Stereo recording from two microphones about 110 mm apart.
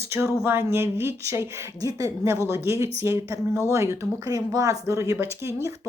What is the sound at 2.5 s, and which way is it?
A woman's voice, 20° right (ahead or behind).